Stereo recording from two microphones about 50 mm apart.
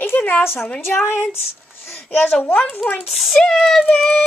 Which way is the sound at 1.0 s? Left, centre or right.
Left.